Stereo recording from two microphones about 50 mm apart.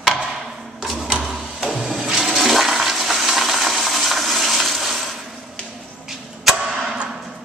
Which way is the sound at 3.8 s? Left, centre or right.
Centre.